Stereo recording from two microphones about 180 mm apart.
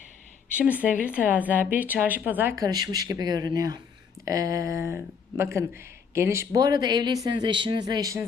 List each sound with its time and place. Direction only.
0.6 s a woman's voice: 10° right (ahead or behind)